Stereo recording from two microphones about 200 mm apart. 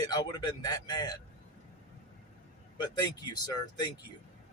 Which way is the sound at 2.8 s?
20° left (ahead or behind).